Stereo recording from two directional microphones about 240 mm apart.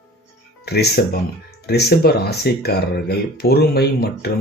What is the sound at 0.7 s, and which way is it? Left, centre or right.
Speech, left.